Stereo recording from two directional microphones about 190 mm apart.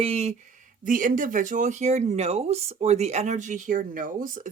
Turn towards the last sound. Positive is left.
turn(degrees=-45)  # may be behind; listen again after turning